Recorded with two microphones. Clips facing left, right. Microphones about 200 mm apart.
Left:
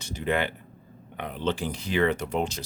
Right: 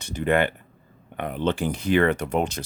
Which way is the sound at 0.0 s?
55° right (ahead or behind).